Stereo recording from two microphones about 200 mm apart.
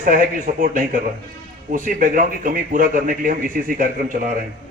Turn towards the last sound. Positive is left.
turn(degrees=-45)  # may be behind; listen again after turning